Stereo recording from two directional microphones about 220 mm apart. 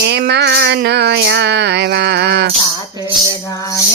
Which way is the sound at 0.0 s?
50° right (ahead or behind).